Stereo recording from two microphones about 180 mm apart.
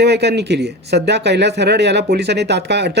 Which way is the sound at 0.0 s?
65° right (ahead or behind).